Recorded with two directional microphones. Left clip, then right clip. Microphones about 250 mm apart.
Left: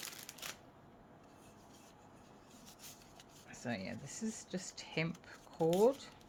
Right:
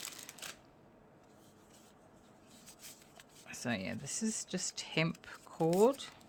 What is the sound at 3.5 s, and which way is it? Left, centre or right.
Speech, right.